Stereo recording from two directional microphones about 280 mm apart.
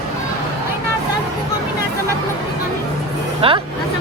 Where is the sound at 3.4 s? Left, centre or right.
Centre.